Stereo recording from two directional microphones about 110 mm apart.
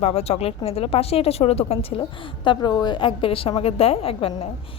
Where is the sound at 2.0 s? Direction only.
50° left (ahead or behind).